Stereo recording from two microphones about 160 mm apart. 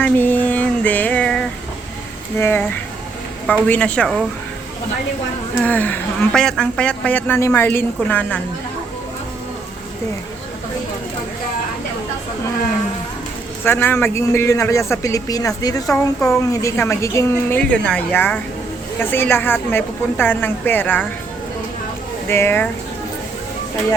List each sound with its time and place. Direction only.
0.0 s a sound: 10° left (ahead or behind)
2.4 s a woman's voice: 15° left (ahead or behind)
5.6 s a woman's voice: 10° left (ahead or behind)
13.7 s a woman's voice: 15° left (ahead or behind)
22.3 s a woman's voice: 15° left (ahead or behind)